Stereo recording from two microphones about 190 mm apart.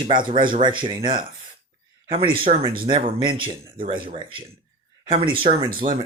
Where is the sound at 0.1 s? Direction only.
25° right (ahead or behind).